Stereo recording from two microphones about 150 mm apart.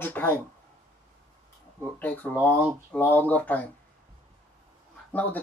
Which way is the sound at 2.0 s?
10° left (ahead or behind).